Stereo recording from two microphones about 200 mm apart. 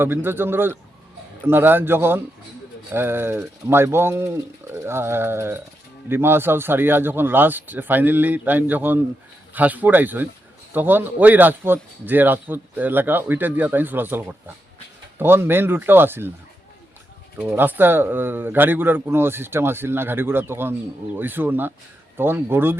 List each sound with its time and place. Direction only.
0.0 s a man's voice: 10° right (ahead or behind)
17.5 s a man's voice: 10° right (ahead or behind)